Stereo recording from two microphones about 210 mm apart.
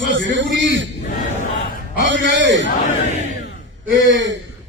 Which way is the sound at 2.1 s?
60° right (ahead or behind).